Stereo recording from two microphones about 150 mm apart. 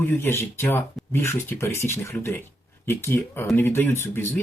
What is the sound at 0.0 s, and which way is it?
Speech, 15° left (ahead or behind).